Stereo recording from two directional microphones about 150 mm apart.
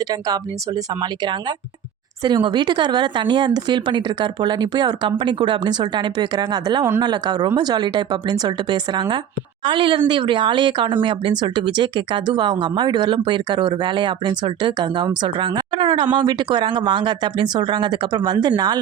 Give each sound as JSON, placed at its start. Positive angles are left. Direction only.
{"t": 0.0, "sound": "speech", "side_deg": -25}